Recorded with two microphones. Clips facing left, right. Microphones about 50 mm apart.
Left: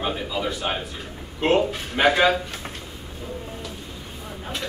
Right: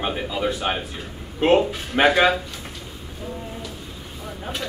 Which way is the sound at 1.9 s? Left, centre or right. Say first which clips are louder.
Right 2 dB; right.